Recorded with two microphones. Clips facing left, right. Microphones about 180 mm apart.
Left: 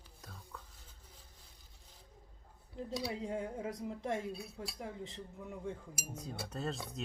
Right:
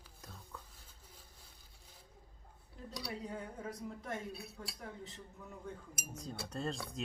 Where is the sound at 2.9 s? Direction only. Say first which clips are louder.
Left 5 dB; 25° left (ahead or behind).